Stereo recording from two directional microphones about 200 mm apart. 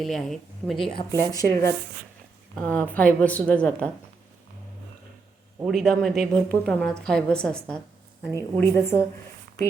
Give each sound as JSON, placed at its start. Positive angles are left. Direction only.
{"t": 0.0, "sound": "speech", "side_deg": 0}
{"t": 1.1, "sound": "a woman's voice", "side_deg": 15}
{"t": 5.6, "sound": "a woman's voice", "side_deg": 0}